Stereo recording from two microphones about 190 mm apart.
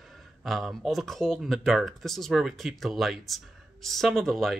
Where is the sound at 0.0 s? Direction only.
Centre (ahead or behind).